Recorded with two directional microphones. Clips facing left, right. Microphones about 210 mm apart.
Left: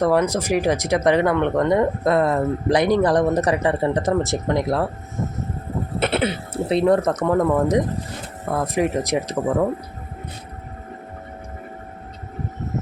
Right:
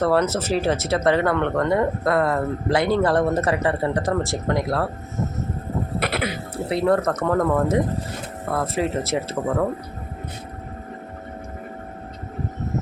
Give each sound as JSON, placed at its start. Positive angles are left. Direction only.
{"t": 0.0, "sound": "speech", "side_deg": 15}
{"t": 6.0, "sound": "speech", "side_deg": 25}